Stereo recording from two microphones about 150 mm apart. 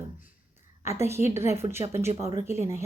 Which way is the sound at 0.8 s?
20° right (ahead or behind).